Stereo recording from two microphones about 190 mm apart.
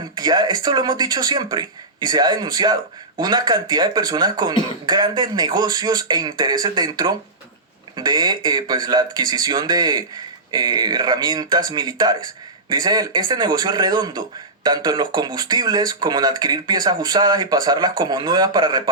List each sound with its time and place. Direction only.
0.2 s speech: 20° right (ahead or behind)